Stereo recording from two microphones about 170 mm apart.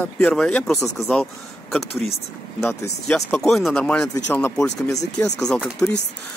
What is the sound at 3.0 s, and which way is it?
Speech, centre (ahead or behind).